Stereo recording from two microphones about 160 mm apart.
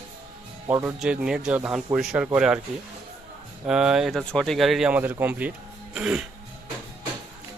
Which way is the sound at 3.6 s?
5° right (ahead or behind).